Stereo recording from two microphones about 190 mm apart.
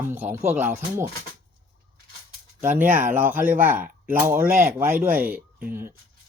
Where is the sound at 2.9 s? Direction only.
10° right (ahead or behind).